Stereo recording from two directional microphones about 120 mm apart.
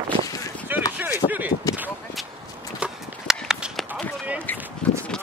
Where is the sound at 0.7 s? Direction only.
15° right (ahead or behind).